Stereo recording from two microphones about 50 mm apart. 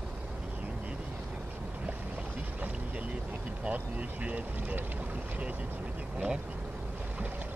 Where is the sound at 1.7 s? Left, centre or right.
Right.